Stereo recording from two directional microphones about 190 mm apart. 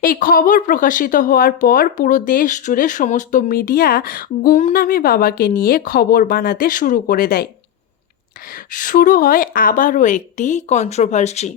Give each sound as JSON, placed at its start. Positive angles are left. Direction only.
{"t": 0.0, "sound": "speech", "side_deg": 50}
{"t": 8.7, "sound": "a woman's voice", "side_deg": 45}